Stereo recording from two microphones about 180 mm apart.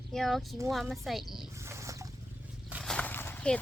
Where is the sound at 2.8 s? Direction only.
5° left (ahead or behind).